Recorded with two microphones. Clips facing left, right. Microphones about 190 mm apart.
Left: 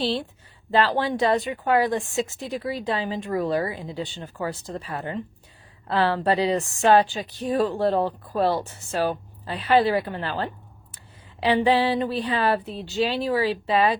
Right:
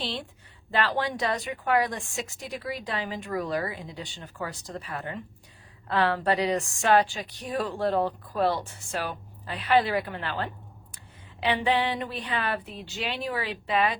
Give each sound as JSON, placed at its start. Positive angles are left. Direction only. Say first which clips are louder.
{"t": 0.7, "sound": "a woman's voice", "louder": "left 5 dB", "side_deg": 30}